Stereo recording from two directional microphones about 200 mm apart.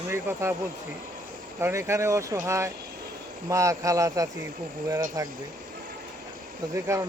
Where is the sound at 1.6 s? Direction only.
15° right (ahead or behind).